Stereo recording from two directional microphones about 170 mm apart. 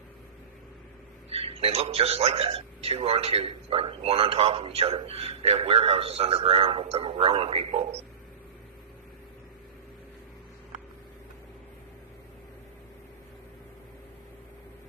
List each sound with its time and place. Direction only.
1.3 s a man's voice: 35° right (ahead or behind)